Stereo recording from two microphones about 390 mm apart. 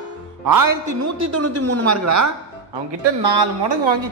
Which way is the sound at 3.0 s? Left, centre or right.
Right.